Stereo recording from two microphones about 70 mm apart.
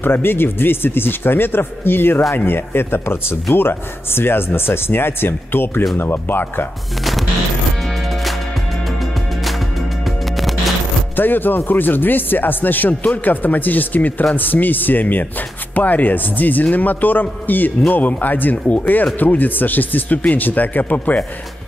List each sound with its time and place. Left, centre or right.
0.0 s speech: left
10.0 s music: centre
11.1 s speech: left